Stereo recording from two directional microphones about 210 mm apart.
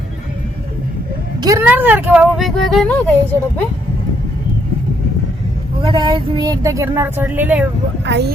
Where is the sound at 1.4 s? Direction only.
15° right (ahead or behind); by 3.1 s 5° left (ahead or behind).